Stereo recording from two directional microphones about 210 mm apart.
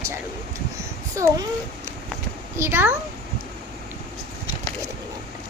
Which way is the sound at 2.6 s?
10° right (ahead or behind).